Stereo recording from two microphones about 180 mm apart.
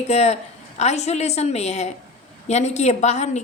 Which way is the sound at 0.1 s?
35° left (ahead or behind).